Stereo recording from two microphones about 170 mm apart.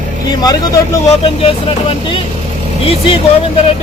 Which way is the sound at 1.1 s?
35° left (ahead or behind).